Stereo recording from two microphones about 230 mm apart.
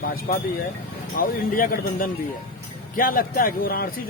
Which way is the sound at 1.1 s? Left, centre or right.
Left.